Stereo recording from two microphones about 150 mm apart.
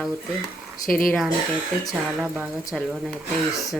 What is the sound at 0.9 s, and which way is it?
Speech, 70° left (ahead or behind).